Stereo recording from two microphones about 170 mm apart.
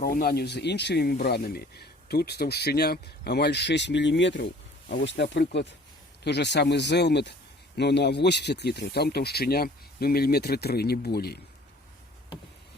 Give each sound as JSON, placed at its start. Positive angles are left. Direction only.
{"t": 0.0, "sound": "speech", "side_deg": 60}
{"t": 4.9, "sound": "speech", "side_deg": 75}